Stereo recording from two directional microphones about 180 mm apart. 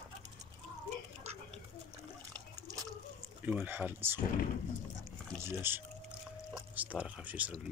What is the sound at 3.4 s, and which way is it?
Speech, 10° right (ahead or behind).